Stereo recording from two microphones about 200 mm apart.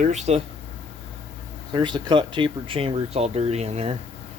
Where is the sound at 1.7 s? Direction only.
20° right (ahead or behind).